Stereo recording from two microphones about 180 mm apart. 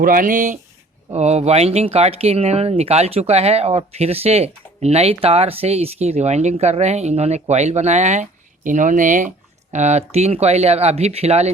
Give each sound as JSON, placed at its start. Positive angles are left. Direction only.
{"t": 0.0, "sound": "speech", "side_deg": -50}